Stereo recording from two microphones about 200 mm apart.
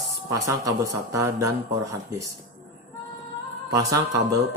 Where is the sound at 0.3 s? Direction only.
15° right (ahead or behind).